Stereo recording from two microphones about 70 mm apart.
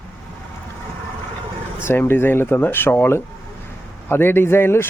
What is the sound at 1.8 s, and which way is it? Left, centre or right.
Speech, left.